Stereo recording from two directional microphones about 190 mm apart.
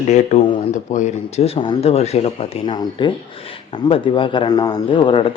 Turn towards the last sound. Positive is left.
turn(degrees=25)  # may be behind; listen again after turning